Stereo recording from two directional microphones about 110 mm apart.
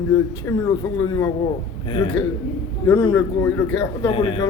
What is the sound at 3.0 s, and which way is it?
Speech, 20° left (ahead or behind).